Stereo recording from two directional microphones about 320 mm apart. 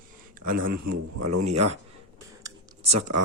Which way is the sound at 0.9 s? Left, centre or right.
Right.